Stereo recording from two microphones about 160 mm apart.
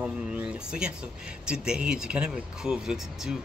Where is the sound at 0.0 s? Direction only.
5° right (ahead or behind).